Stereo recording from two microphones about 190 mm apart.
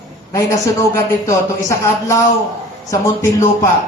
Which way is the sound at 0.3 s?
15° left (ahead or behind).